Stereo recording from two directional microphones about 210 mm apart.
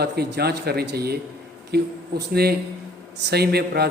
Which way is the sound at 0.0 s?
50° right (ahead or behind).